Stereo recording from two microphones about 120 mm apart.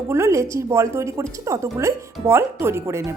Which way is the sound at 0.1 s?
25° right (ahead or behind).